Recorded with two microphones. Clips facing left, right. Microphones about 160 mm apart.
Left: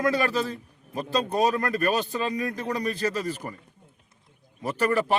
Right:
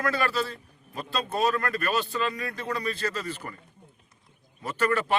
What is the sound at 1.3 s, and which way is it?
Speech, 15° left (ahead or behind).